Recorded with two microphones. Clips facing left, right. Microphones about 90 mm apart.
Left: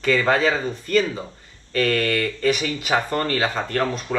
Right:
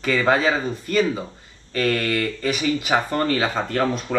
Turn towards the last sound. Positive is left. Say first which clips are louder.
# right 2 dB
turn(degrees=20)  # may be behind; listen again after turning